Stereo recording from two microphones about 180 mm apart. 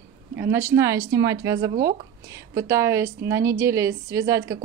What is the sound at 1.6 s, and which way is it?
Speech, 55° right (ahead or behind).